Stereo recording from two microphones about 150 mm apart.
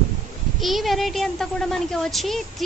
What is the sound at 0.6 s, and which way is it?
A woman's voice, centre (ahead or behind).